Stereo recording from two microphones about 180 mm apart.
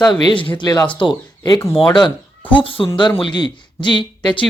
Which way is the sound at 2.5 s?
30° left (ahead or behind).